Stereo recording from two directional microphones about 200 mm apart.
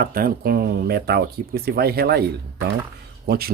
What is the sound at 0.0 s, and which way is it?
Speech, 45° right (ahead or behind).